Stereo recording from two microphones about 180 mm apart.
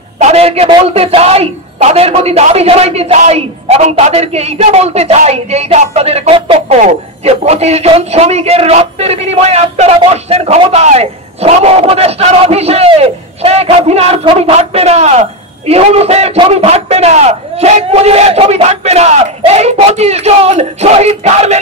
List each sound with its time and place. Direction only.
0.2 s a woman's voice: 35° right (ahead or behind)